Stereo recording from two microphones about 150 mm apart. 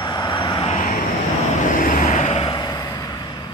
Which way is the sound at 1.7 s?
65° left (ahead or behind).